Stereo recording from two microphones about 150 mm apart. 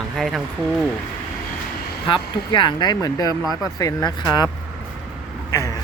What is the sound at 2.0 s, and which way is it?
Speech, 35° left (ahead or behind).